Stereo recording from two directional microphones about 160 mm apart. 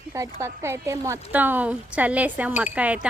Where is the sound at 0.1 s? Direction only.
15° right (ahead or behind).